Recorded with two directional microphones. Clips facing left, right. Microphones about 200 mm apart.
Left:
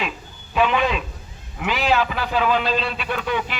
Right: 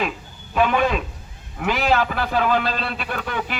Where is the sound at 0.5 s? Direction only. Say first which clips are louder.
Right 1 dB; 45° right (ahead or behind).